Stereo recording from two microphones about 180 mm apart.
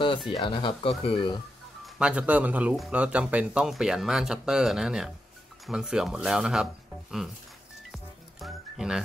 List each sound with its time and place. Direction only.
0.3 s speech: 25° left (ahead or behind)
2.0 s a man's voice: 5° right (ahead or behind)
7.9 s music: centre (ahead or behind)